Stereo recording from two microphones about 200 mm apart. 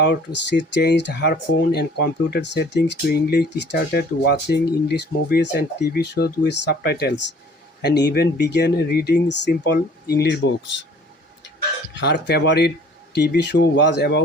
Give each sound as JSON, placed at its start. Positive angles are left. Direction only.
{"t": 0.0, "sound": "speech", "side_deg": 60}
{"t": 11.9, "sound": "speech", "side_deg": 60}